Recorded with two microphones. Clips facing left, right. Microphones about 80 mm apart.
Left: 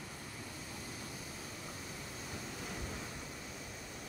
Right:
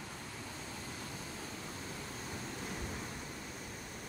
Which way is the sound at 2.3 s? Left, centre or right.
Right.